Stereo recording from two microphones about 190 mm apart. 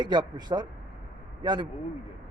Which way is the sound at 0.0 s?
20° right (ahead or behind).